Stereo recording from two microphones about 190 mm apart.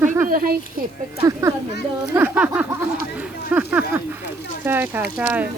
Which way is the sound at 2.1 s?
10° right (ahead or behind).